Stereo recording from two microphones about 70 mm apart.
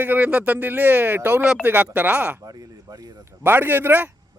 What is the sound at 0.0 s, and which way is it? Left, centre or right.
Speech, right.